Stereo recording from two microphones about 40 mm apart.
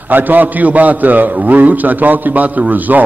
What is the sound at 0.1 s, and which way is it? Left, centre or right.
A man's voice, right.